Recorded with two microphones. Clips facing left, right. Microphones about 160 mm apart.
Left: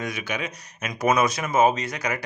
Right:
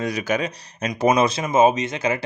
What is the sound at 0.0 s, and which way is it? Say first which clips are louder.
Speech: right 7 dB; 35° right (ahead or behind).